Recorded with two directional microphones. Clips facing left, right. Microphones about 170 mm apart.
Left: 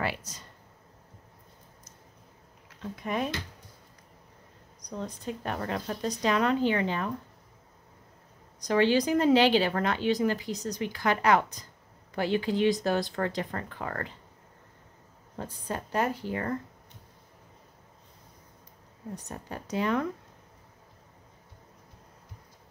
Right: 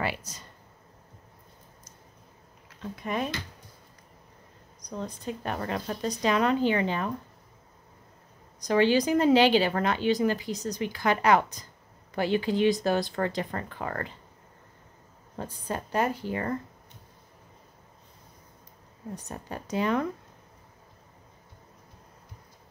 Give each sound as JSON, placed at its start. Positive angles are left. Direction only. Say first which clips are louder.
{"t": 0.0, "sound": "speech", "louder": "right 1 dB", "side_deg": -5}
{"t": 2.8, "sound": "speech", "louder": "even", "side_deg": 5}
{"t": 5.0, "sound": "speech", "louder": "right 1 dB", "side_deg": -5}
{"t": 8.6, "sound": "speech", "louder": "right 1 dB", "side_deg": -10}
{"t": 15.3, "sound": "speech", "louder": "right 1 dB", "side_deg": -15}
{"t": 19.2, "sound": "speech", "louder": "right 1 dB", "side_deg": -15}